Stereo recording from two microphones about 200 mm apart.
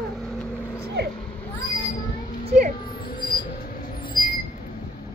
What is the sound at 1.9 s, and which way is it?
Mouse, 45° left (ahead or behind).